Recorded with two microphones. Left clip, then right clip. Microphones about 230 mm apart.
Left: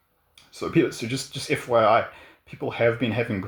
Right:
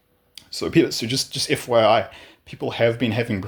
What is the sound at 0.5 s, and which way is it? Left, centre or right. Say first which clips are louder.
Speech: right 4 dB; right.